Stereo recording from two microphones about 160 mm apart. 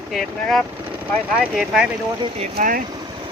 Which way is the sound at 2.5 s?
60° right (ahead or behind).